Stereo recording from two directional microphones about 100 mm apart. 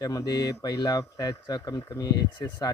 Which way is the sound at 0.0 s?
40° left (ahead or behind).